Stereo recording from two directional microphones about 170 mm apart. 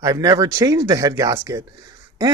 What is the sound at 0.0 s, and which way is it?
Speech, 20° right (ahead or behind).